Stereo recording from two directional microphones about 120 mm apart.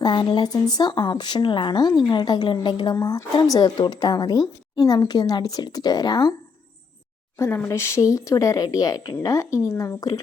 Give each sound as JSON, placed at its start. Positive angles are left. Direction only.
{"t": 0.0, "sound": "speech", "side_deg": 40}
{"t": 7.3, "sound": "speech", "side_deg": 20}